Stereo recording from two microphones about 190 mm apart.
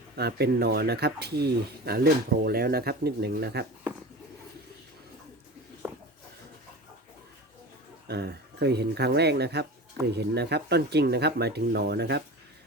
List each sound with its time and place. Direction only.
0.2 s speech: 55° right (ahead or behind)
8.0 s speech: 60° right (ahead or behind)